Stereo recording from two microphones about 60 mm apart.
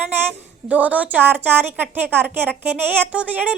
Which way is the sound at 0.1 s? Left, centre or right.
Right.